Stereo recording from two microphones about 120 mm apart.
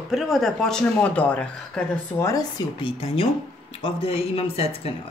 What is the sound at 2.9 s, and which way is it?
Speech, 50° left (ahead or behind).